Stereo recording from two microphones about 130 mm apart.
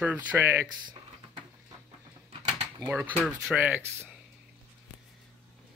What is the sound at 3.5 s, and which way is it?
Speech, 15° right (ahead or behind).